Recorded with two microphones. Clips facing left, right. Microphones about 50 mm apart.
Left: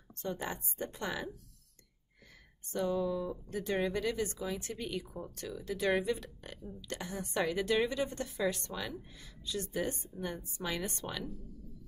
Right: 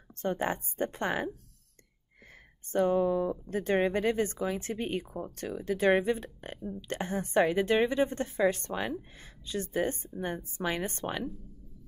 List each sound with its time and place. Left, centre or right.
0.2 s speech: right
2.7 s speech: right